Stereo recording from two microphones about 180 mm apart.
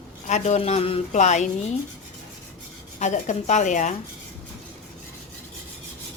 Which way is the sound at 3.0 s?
40° left (ahead or behind).